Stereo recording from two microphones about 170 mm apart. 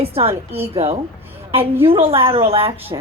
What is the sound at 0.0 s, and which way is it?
Speech, 35° right (ahead or behind).